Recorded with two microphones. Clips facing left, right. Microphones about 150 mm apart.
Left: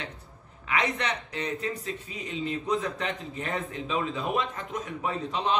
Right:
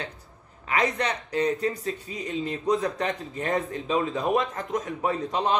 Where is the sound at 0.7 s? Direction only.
40° right (ahead or behind).